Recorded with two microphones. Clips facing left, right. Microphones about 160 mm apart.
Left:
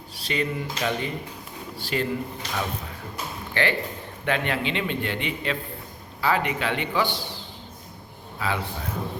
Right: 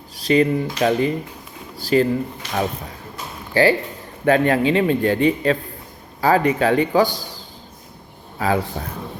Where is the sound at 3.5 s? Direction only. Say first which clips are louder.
Right 9 dB; 35° right (ahead or behind).